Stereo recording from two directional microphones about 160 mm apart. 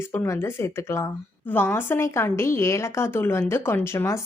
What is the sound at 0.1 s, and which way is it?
A woman's voice, 15° left (ahead or behind).